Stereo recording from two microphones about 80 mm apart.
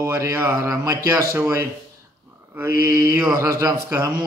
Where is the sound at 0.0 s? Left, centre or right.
Right.